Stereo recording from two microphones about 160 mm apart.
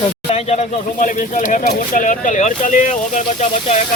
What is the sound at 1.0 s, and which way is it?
Speech, 55° left (ahead or behind).